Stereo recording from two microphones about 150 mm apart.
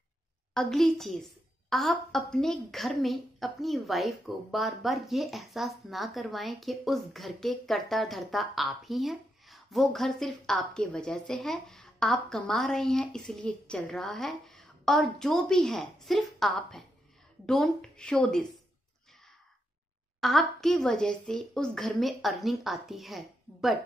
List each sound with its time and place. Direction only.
0.6 s a woman's voice: 5° left (ahead or behind)
20.2 s a woman's voice: centre (ahead or behind)